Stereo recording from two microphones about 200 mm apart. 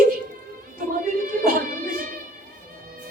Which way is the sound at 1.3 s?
45° right (ahead or behind).